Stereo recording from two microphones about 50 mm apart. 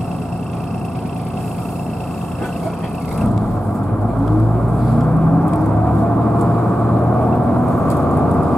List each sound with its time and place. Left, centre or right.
5.0 s gong: centre
6.4 s vehicle: centre